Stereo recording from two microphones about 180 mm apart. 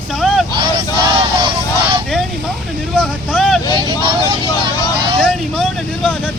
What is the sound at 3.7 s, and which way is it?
Vehicle, 25° right (ahead or behind).